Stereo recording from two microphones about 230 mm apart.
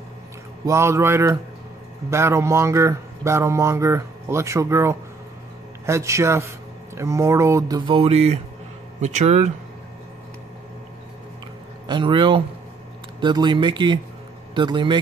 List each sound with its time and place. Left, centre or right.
0.7 s speech: centre; by 9.5 s right
11.9 s speech: right